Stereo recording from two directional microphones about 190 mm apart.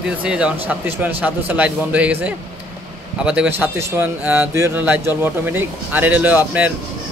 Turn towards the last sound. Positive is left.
turn(degrees=-10)  # may be behind; listen again after turning